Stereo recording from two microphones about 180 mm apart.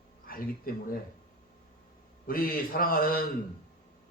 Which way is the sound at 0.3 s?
55° left (ahead or behind).